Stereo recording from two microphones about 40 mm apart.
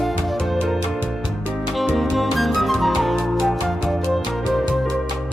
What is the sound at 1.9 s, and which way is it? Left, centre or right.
Music, centre.